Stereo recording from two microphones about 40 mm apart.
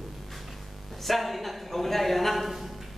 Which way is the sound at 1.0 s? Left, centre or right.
Centre.